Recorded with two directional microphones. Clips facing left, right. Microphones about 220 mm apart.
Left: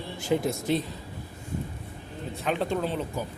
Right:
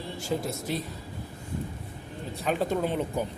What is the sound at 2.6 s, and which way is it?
Speech, 10° right (ahead or behind).